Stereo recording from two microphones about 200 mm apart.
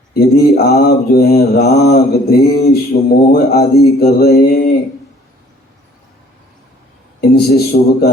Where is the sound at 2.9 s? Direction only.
50° left (ahead or behind).